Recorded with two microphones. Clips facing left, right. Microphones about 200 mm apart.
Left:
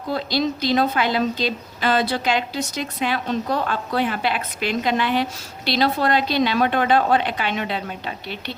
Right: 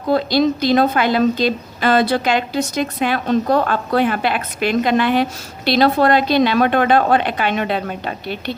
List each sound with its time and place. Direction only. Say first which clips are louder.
0.1 s a woman's voice: right 7 dB; 55° right (ahead or behind)